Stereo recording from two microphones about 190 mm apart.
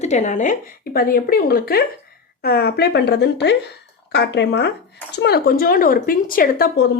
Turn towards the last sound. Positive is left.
turn(degrees=50)  # may be behind; listen again after turning